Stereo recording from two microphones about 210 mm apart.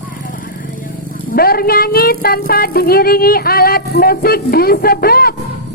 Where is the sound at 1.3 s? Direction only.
45° left (ahead or behind).